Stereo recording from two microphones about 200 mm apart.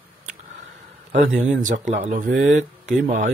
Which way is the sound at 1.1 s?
40° right (ahead or behind).